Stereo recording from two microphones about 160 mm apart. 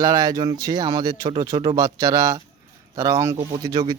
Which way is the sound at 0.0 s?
20° right (ahead or behind).